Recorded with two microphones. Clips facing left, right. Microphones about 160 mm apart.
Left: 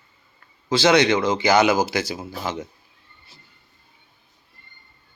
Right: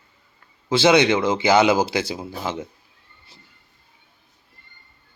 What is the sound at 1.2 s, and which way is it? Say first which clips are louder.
Speech: right 1 dB; 25° right (ahead or behind).